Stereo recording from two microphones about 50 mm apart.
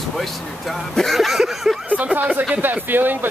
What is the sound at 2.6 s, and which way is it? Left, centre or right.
Speech, right.